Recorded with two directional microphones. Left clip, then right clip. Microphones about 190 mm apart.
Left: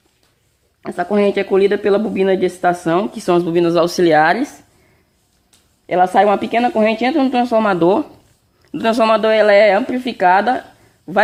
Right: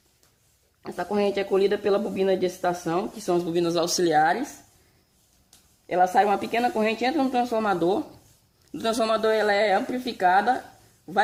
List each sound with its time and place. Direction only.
0.8 s speech: 50° left (ahead or behind)
5.9 s speech: 50° left (ahead or behind)